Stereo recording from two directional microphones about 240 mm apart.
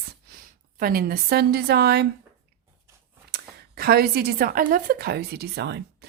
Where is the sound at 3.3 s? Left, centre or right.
Right.